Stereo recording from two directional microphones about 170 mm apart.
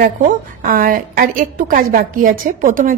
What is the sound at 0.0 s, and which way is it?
A woman's voice, 55° right (ahead or behind).